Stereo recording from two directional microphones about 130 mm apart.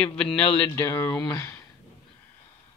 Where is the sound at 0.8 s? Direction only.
20° left (ahead or behind).